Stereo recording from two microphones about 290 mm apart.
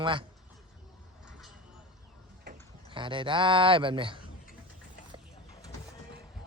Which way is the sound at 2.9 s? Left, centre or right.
Centre.